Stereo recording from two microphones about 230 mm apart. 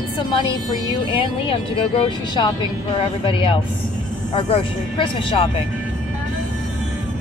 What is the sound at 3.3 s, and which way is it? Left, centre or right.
Speech, left.